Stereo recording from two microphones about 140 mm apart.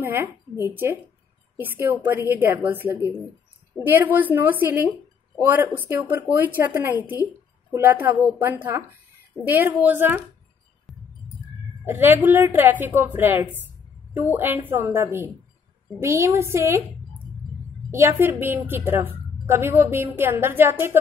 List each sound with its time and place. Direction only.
0.0 s a woman's voice: 15° right (ahead or behind)
10.9 s music: centre (ahead or behind)
11.8 s a woman's voice: 15° right (ahead or behind)
17.9 s a woman's voice: 15° right (ahead or behind)